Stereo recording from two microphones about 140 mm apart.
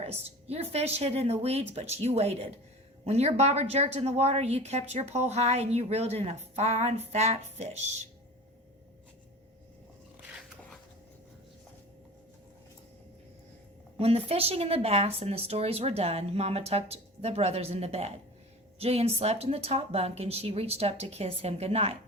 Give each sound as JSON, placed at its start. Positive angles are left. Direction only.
{"t": 0.0, "sound": "a woman's voice", "side_deg": -50}
{"t": 14.0, "sound": "a woman's voice", "side_deg": -45}